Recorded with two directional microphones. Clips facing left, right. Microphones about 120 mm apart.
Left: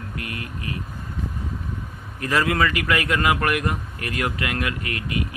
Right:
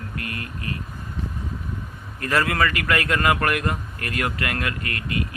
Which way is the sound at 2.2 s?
15° left (ahead or behind).